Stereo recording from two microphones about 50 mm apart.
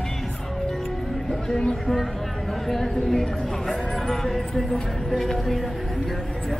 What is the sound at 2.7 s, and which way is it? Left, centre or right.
Speech, centre.